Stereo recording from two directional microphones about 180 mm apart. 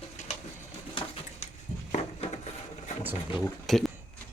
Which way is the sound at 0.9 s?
30° left (ahead or behind).